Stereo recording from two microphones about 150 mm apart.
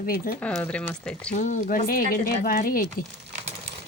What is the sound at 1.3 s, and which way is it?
Speech, 55° left (ahead or behind).